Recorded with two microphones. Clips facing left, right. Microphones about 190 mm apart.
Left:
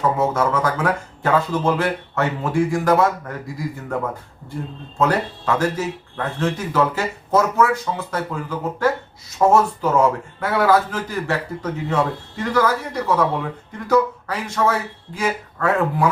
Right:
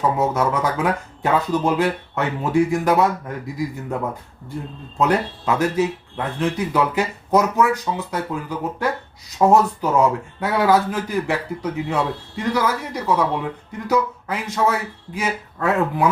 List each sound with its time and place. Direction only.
0.2 s speech: 15° right (ahead or behind)
4.9 s speech: 15° right (ahead or behind)